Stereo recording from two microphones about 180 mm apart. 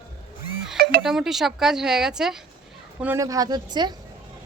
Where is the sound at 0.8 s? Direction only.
55° right (ahead or behind).